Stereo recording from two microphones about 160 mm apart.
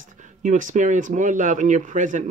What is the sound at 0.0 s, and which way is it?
Speech, 50° right (ahead or behind).